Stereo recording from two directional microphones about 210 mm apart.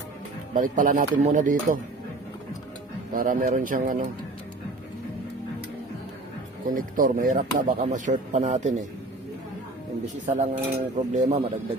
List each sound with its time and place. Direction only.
0.5 s speech: 40° right (ahead or behind)
3.1 s speech: 40° right (ahead or behind)
6.7 s speech: 40° right (ahead or behind)
10.2 s speech: 40° right (ahead or behind)